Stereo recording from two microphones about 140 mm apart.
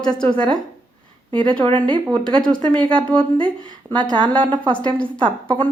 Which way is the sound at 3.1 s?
35° right (ahead or behind).